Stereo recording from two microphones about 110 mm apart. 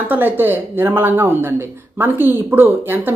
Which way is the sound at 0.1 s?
20° right (ahead or behind).